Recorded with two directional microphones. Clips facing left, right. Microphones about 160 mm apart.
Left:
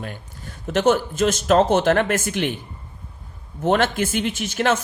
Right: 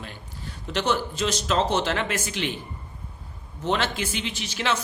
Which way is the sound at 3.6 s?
50° left (ahead or behind).